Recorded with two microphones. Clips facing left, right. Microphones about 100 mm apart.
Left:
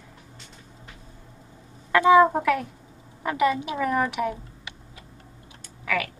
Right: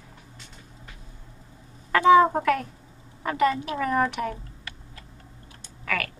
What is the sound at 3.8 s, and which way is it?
Speech, 5° left (ahead or behind).